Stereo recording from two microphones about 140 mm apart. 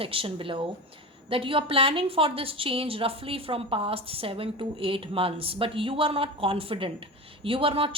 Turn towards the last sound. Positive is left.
turn(degrees=-40)  # may be behind; listen again after turning